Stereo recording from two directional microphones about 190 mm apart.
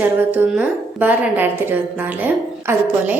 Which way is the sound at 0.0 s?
10° right (ahead or behind).